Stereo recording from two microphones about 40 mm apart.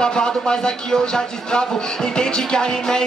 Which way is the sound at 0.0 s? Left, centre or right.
Left.